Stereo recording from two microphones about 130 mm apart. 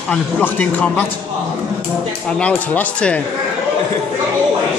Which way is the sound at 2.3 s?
10° left (ahead or behind).